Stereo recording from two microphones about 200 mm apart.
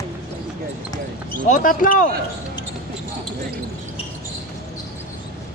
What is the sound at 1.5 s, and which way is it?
Speech, 45° left (ahead or behind).